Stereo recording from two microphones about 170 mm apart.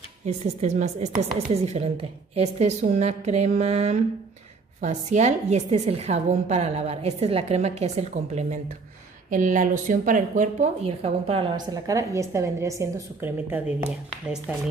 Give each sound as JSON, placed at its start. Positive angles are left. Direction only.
{"t": 0.2, "sound": "a woman's voice", "side_deg": -45}